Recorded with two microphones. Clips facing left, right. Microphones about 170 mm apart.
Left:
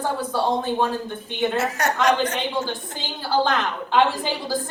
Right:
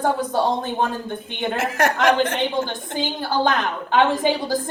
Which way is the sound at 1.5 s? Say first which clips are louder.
Right 7 dB; 55° right (ahead or behind).